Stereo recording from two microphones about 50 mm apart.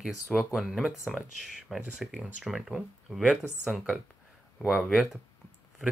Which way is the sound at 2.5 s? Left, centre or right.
Centre.